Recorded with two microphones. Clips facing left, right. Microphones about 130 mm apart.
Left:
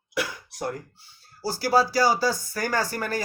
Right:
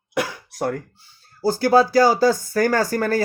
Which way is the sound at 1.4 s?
50° right (ahead or behind).